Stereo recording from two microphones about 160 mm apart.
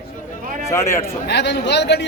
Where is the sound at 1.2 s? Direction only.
90° left.